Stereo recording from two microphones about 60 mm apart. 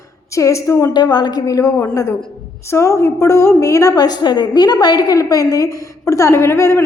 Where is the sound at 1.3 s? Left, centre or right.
Left.